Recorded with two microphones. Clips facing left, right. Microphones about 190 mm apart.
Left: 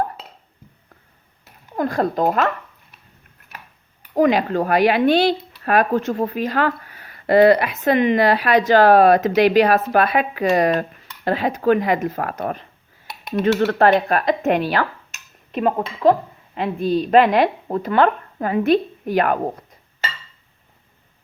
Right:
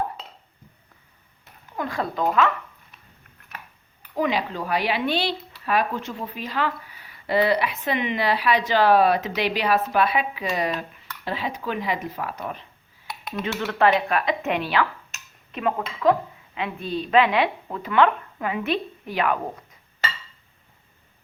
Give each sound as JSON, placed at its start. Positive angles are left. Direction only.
{"t": 1.7, "sound": "speech", "side_deg": 45}
{"t": 4.1, "sound": "speech", "side_deg": 50}
{"t": 13.6, "sound": "speech", "side_deg": 40}